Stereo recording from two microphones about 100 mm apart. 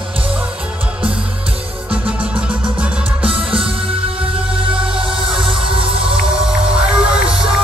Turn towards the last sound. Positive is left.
turn(degrees=-5)  # may be behind; listen again after turning